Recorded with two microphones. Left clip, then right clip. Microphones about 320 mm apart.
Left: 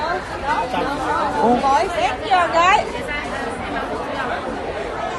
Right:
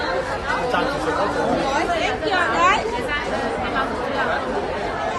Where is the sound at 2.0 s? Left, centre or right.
Left.